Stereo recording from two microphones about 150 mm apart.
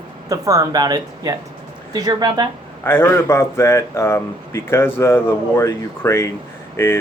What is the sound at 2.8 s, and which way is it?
Speech, 15° left (ahead or behind).